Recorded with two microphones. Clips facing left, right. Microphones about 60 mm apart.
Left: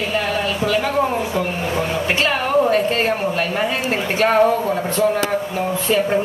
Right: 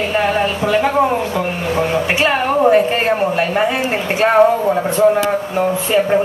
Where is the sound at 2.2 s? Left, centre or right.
Centre.